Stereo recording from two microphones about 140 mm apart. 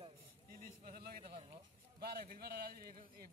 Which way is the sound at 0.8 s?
90° right.